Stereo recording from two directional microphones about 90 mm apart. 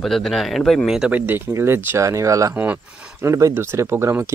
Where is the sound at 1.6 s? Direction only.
30° right (ahead or behind).